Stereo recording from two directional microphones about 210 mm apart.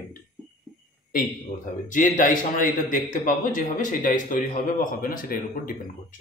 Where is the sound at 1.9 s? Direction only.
40° left (ahead or behind).